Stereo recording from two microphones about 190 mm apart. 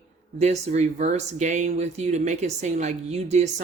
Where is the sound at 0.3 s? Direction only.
35° right (ahead or behind).